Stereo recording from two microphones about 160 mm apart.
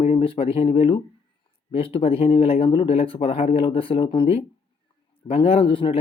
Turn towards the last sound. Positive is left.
turn(degrees=35)  # may be behind; listen again after turning